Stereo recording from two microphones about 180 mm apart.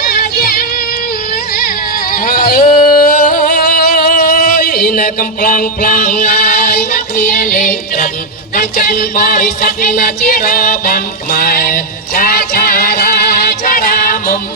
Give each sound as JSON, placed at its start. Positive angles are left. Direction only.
{"t": 0.1, "sound": "music", "side_deg": 60}
{"t": 2.1, "sound": "a sound", "side_deg": 55}
{"t": 8.5, "sound": "music", "side_deg": 50}